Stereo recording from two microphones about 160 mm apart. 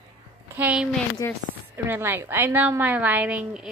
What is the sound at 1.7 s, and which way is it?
A woman's voice, 15° right (ahead or behind).